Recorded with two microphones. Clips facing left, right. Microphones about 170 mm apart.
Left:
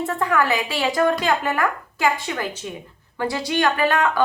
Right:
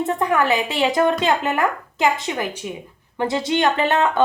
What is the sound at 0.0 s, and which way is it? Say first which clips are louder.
Speech: right 2 dB; 20° right (ahead or behind).